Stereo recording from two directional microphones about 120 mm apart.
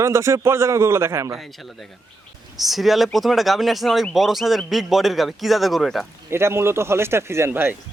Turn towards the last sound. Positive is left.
turn(degrees=-15)  # may be behind; listen again after turning